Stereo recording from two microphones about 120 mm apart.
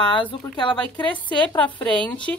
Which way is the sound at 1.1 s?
10° left (ahead or behind).